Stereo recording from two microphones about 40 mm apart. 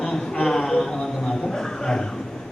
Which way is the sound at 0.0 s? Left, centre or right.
Centre.